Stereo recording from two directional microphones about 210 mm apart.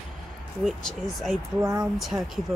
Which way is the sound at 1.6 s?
15° right (ahead or behind).